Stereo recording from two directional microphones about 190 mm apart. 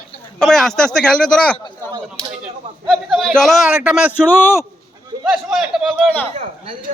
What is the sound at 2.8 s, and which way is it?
A man's voice, centre (ahead or behind).